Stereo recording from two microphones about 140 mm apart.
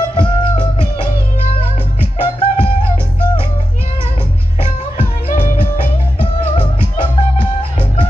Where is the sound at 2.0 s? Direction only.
40° left (ahead or behind).